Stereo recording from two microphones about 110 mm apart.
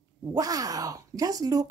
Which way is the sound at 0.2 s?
35° right (ahead or behind).